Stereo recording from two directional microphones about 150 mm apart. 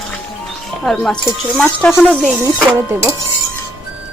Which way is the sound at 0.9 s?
Centre (ahead or behind).